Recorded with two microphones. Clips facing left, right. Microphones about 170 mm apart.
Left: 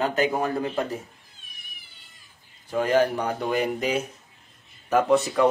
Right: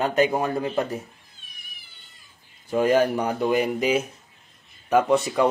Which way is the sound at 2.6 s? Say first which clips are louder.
Right 2 dB; 15° right (ahead or behind).